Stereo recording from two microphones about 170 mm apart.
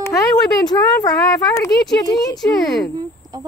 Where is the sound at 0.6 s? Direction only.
25° left (ahead or behind).